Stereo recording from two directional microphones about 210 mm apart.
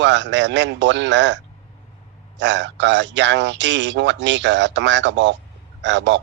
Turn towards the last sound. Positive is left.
turn(degrees=-55)  # may be behind; listen again after turning